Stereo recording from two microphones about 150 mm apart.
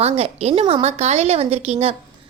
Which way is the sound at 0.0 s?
45° right (ahead or behind).